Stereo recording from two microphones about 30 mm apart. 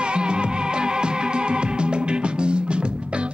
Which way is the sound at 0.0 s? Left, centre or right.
Right.